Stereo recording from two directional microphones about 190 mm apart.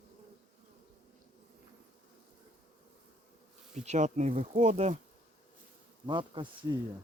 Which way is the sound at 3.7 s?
40° right (ahead or behind).